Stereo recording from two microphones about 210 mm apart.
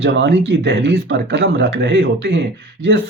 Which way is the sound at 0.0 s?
55° right (ahead or behind).